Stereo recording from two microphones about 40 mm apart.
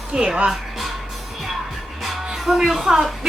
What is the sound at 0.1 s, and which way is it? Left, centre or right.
Speech, right.